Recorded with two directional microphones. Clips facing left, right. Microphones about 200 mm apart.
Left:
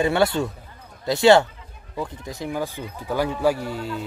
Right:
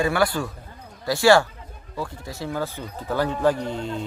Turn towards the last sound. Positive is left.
turn(degrees=5)  # may be behind; listen again after turning